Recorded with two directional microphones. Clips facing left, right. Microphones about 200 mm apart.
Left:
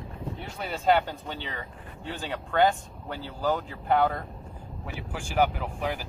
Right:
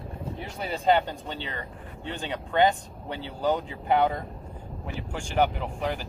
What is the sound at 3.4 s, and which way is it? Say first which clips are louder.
Speech: right 2 dB; 20° right (ahead or behind).